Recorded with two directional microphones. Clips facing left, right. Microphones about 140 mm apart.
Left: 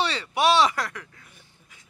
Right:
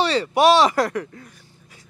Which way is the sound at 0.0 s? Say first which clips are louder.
Right 6 dB; 40° right (ahead or behind).